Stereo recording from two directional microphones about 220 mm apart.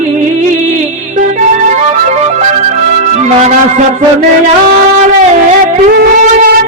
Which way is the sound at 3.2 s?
30° right (ahead or behind).